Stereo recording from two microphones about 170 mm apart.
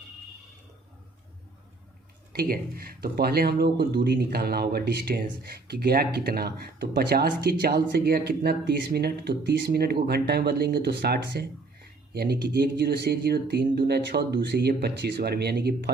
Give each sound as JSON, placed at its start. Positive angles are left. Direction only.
{"t": 2.3, "sound": "speech", "side_deg": -60}